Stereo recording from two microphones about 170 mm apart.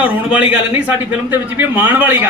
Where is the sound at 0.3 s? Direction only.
10° right (ahead or behind).